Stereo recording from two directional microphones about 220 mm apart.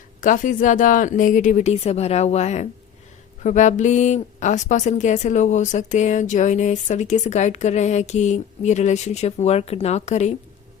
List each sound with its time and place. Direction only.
0.2 s a woman's voice: 35° left (ahead or behind)